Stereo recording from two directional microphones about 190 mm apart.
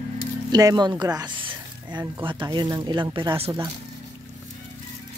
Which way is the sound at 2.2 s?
25° right (ahead or behind).